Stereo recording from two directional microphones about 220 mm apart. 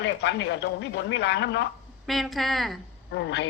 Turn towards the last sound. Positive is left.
turn(degrees=50)  # may be behind; listen again after turning